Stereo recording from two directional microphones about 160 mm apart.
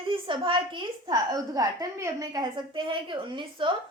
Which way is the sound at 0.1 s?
30° right (ahead or behind).